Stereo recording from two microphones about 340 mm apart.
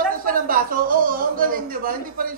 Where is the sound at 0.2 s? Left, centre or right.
Right.